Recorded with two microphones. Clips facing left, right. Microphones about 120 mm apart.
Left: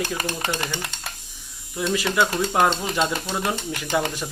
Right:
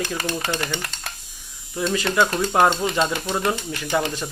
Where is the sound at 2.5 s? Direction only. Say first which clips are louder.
Right 3 dB; 10° right (ahead or behind).